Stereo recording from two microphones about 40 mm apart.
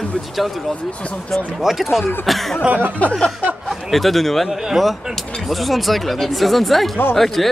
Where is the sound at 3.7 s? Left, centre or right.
Centre.